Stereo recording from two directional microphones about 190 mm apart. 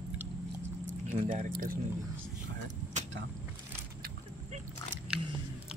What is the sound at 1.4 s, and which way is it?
Speech, 50° right (ahead or behind).